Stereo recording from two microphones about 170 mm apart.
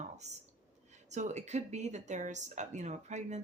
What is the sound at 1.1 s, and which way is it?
A woman's voice, 45° right (ahead or behind).